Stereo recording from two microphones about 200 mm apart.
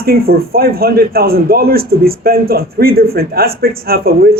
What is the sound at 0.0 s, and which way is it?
A man's voice, 50° right (ahead or behind).